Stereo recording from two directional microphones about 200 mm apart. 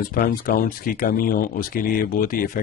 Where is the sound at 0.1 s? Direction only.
45° left (ahead or behind).